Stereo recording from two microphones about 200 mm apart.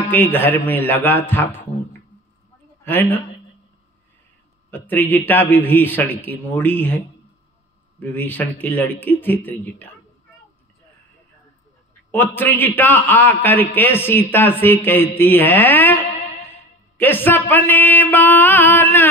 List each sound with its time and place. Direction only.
0.1 s a man's voice: 10° left (ahead or behind)
4.6 s a man's voice: 10° left (ahead or behind)
8.0 s a man's voice: 10° left (ahead or behind)
12.1 s a man's voice: 10° left (ahead or behind)